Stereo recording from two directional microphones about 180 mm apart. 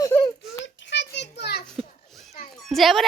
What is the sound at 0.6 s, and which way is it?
Children playing, 80° left.